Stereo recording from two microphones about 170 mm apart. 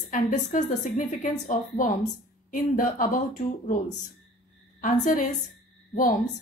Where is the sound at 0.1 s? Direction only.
45° left (ahead or behind).